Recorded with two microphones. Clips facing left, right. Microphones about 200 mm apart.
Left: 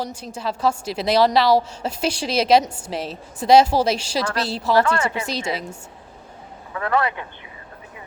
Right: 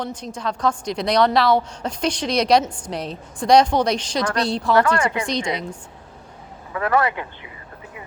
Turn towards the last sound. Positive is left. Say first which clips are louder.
# right 2 dB
turn(degrees=-25)  # may be behind; listen again after turning